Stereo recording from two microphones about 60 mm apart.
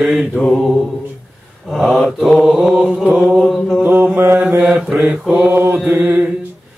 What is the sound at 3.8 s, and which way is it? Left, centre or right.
Mantra, right.